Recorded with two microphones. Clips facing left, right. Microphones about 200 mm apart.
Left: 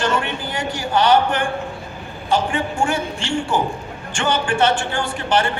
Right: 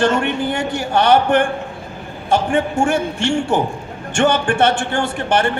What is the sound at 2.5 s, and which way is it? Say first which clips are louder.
Speech: right 5 dB; 45° right (ahead or behind).